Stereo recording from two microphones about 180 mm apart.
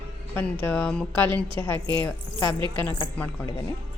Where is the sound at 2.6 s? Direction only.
25° right (ahead or behind).